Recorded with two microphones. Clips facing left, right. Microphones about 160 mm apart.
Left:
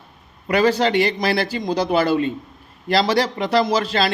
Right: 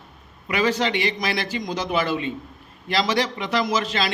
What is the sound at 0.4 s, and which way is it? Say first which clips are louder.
A man's voice: left 5 dB; 35° left (ahead or behind).